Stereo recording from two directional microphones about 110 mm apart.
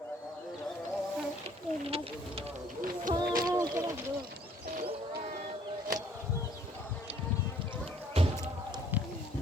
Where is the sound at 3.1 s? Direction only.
35° right (ahead or behind).